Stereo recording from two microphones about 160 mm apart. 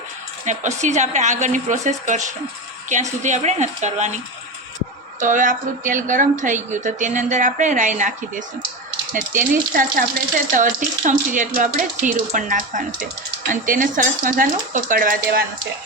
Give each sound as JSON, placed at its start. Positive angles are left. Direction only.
{"t": 0.4, "sound": "speech", "side_deg": -50}
{"t": 5.2, "sound": "speech", "side_deg": -55}